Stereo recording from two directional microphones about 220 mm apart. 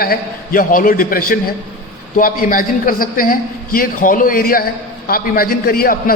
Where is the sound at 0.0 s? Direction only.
40° left (ahead or behind).